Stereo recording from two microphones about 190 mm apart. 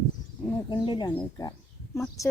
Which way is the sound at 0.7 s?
25° left (ahead or behind).